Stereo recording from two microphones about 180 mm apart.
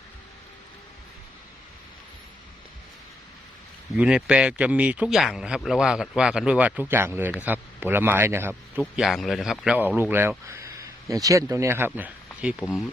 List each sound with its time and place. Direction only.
3.9 s a man's voice: 5° right (ahead or behind)
9.0 s speech: centre (ahead or behind)